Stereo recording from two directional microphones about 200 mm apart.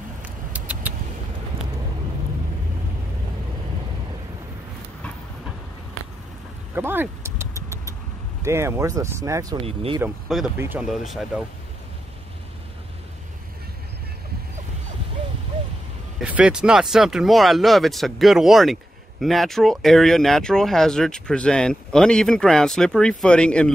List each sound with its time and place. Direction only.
0.5 s vehicle: 5° right (ahead or behind)
6.7 s vehicle: 10° right (ahead or behind)
8.4 s speech: 15° right (ahead or behind)
9.7 s speech: 30° right (ahead or behind)
10.2 s speech: centre (ahead or behind)
16.2 s speech: 5° right (ahead or behind)